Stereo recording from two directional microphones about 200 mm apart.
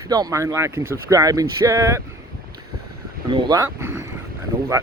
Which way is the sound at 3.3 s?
20° right (ahead or behind).